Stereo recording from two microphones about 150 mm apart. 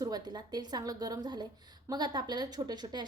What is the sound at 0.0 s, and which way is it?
A woman's voice, 25° right (ahead or behind).